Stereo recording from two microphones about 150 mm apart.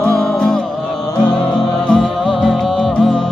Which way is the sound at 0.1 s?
5° left (ahead or behind).